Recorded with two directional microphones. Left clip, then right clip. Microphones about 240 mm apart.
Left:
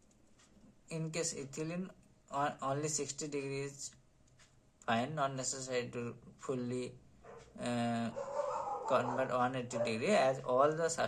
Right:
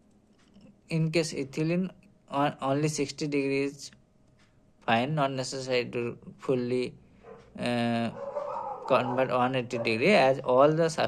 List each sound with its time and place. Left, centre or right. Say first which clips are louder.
0.9 s speech: right 11 dB; right